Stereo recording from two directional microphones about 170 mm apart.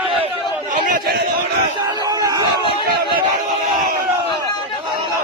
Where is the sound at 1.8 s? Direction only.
20° right (ahead or behind).